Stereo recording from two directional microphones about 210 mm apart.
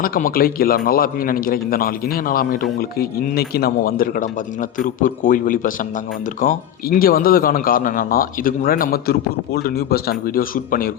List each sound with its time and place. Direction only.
0.0 s a man's voice: 45° left (ahead or behind)